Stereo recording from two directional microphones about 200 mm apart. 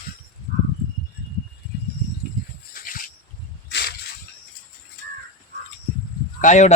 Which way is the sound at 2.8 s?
45° left (ahead or behind).